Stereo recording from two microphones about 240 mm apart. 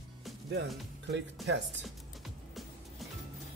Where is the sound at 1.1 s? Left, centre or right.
Right.